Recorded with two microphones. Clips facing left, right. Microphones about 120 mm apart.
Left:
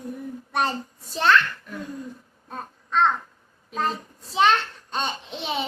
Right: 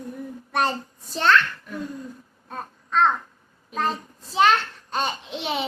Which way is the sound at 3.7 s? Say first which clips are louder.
Right 1 dB; centre (ahead or behind).